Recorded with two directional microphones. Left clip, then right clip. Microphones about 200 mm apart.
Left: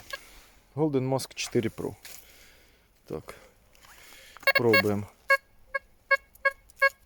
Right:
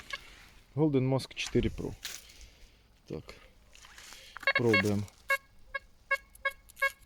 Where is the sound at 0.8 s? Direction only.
5° left (ahead or behind); by 2.0 s 20° left (ahead or behind).